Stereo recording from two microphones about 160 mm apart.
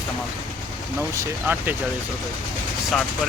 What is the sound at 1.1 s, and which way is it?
Speech, 15° right (ahead or behind).